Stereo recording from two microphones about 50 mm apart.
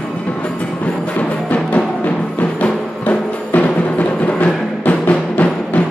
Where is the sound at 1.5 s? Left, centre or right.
Left.